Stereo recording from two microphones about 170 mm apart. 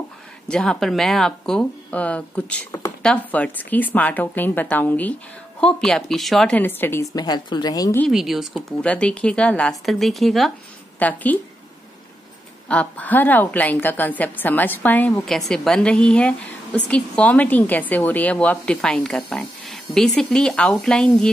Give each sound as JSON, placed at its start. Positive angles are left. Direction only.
{"t": 0.5, "sound": "a woman's voice", "side_deg": 5}
{"t": 7.2, "sound": "speech", "side_deg": 25}
{"t": 8.1, "sound": "a woman's voice", "side_deg": -5}
{"t": 12.6, "sound": "a woman's voice", "side_deg": 5}